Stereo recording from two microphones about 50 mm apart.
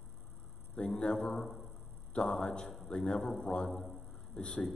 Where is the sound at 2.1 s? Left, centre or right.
Centre.